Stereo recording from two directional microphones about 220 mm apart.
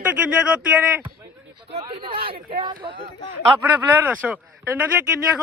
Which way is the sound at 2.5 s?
20° right (ahead or behind).